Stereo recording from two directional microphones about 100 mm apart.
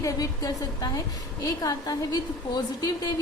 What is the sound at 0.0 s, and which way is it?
A woman's voice, 35° left (ahead or behind).